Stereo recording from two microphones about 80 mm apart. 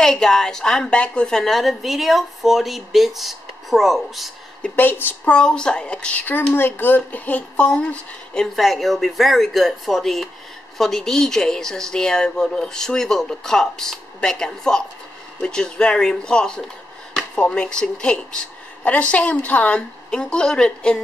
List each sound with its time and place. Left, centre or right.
0.0 s a woman's voice: centre
4.7 s speech: left
5.3 s a woman's voice: centre
8.5 s a woman's voice: centre